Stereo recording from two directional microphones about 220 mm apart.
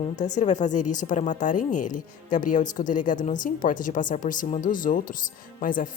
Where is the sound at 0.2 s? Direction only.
35° left (ahead or behind).